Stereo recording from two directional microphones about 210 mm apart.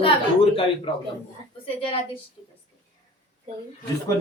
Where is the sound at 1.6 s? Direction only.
25° left (ahead or behind).